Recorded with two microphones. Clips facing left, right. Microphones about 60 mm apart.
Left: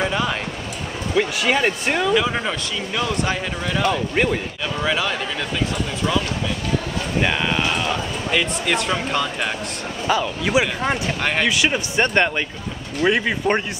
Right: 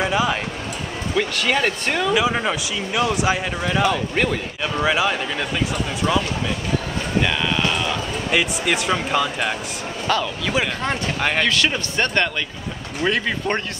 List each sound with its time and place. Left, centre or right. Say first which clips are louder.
0.0 s a sound: right 2 dB; centre
1.1 s speech: left 1 dB; centre
2.1 s speech: right 1 dB; centre
3.9 s speech: left 1 dB; centre
4.7 s speech: right 3 dB; centre
7.2 s basketball bounce: even; centre
8.3 s speech: right 1 dB; centre
10.0 s speech: left 1 dB; centre